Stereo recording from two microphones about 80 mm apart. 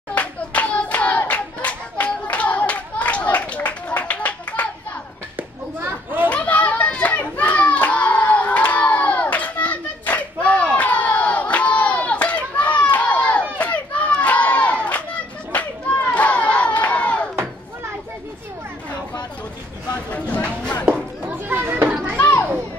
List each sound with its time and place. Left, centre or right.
0.1 s hands: centre
5.8 s children playing: right
6.2 s children playing: centre
13.6 s crowd: centre
20.1 s a sound: centre
21.3 s a sound: right
22.1 s children playing: left